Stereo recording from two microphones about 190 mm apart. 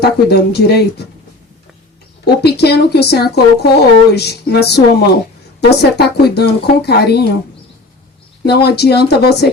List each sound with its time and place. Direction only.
0.0 s speech: 60° left (ahead or behind)
2.2 s speech: 60° left (ahead or behind)
8.4 s speech: 60° left (ahead or behind)